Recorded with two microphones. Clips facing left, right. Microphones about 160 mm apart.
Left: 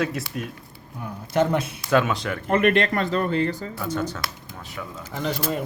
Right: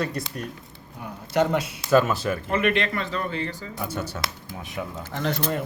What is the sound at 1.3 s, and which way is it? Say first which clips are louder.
Speech: left 1 dB; 50° left (ahead or behind).